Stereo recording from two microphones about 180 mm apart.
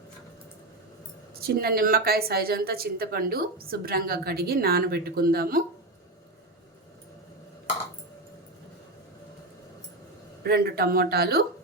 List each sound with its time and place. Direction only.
1.4 s a woman's voice: 60° right (ahead or behind)
10.4 s a woman's voice: 60° right (ahead or behind)